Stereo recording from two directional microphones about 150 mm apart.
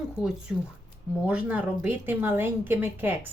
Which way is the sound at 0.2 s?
5° right (ahead or behind).